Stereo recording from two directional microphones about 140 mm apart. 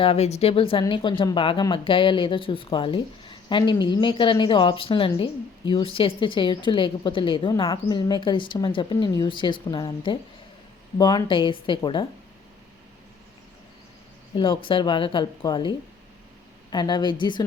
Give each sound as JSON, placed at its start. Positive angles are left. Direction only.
{"t": 0.0, "sound": "speech", "side_deg": 50}
{"t": 14.3, "sound": "speech", "side_deg": 35}
{"t": 16.7, "sound": "speech", "side_deg": 30}